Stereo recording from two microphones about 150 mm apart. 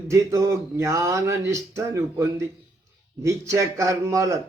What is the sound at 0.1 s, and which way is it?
Speech, 20° right (ahead or behind).